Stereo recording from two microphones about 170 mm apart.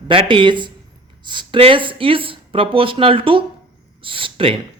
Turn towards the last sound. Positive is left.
turn(degrees=-35)  # may be behind; listen again after turning